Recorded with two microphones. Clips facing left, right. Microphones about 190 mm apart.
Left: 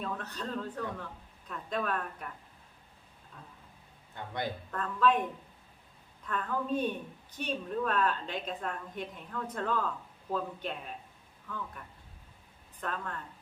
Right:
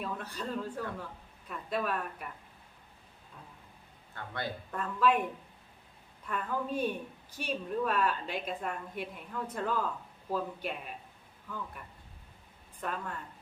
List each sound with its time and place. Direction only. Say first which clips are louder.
0.0 s a woman's voice: even; 10° right (ahead or behind)
4.1 s speech: left 2 dB; 15° left (ahead or behind)
4.7 s a woman's voice: even; 10° right (ahead or behind)
6.2 s a woman's voice: left 1 dB; 10° right (ahead or behind)
12.8 s a woman's voice: even; 10° right (ahead or behind)